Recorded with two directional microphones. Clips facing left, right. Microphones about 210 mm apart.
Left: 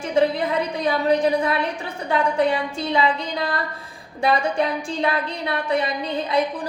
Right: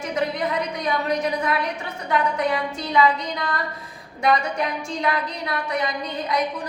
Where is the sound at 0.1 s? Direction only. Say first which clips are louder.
Left 5 dB; 30° left (ahead or behind).